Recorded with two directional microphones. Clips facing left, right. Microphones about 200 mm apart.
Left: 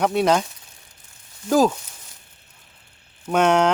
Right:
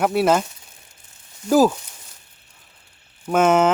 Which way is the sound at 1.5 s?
5° right (ahead or behind).